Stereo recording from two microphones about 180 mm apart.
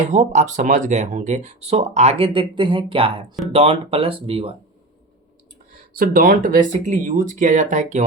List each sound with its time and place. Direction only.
0.0 s speech: 40° right (ahead or behind)
6.0 s speech: 50° right (ahead or behind)